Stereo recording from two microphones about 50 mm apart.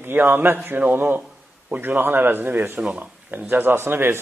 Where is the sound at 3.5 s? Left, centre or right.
Right.